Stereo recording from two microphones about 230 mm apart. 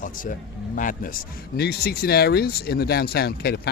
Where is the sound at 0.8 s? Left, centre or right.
Left.